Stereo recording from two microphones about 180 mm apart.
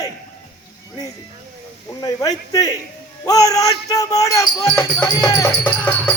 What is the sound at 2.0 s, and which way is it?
Speech, 20° left (ahead or behind).